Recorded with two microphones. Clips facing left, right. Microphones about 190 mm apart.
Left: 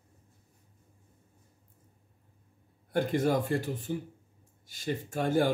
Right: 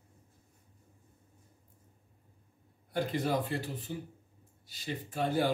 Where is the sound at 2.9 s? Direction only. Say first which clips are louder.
Left 4 dB; 50° left (ahead or behind).